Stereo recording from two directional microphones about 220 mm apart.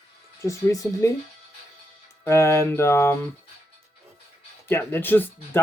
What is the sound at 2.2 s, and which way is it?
Speech, 15° left (ahead or behind).